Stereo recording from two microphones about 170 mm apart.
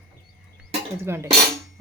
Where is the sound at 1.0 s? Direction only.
15° right (ahead or behind).